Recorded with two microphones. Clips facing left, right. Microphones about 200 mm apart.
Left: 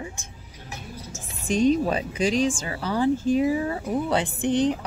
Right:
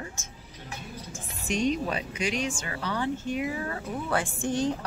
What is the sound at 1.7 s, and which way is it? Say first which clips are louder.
Speech: left 7 dB; 35° left (ahead or behind).